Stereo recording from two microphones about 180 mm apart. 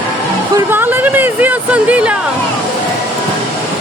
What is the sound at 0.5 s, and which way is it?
Speech, 10° right (ahead or behind).